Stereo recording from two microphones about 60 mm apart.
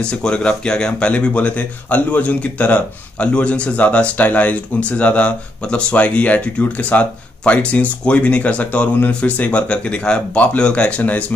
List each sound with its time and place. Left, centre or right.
0.0 s speech: centre